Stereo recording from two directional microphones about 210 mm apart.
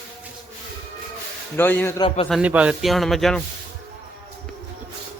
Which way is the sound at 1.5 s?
10° left (ahead or behind).